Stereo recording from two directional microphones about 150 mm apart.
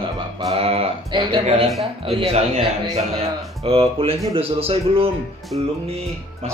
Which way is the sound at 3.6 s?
40° right (ahead or behind).